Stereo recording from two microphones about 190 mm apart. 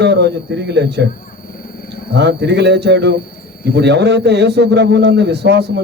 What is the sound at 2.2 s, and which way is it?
A man's voice, 65° right (ahead or behind).